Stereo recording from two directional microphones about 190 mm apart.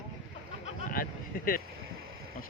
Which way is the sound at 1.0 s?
50° left (ahead or behind).